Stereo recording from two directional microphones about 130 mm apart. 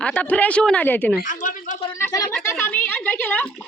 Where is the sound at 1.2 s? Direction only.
80° left.